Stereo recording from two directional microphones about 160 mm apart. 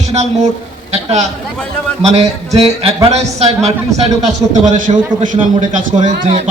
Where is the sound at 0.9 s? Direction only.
40° right (ahead or behind).